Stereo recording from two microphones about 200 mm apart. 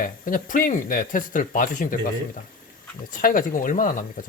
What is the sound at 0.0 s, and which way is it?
Speech, 40° left (ahead or behind).